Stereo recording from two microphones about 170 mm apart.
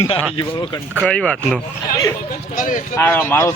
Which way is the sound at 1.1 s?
5° left (ahead or behind).